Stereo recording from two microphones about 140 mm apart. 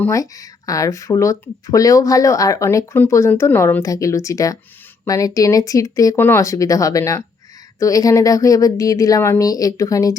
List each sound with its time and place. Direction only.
0.1 s speech: 25° left (ahead or behind)